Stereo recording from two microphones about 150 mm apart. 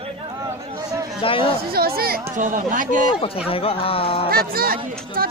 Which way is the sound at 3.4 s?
40° left (ahead or behind).